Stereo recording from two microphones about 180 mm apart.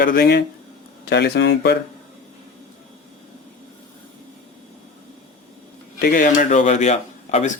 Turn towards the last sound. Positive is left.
turn(degrees=40)  # may be behind; listen again after turning